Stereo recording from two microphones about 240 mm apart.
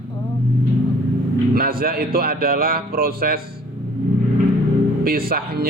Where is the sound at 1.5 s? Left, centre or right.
Right.